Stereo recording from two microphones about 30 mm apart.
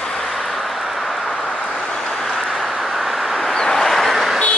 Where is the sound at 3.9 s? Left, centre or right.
Centre.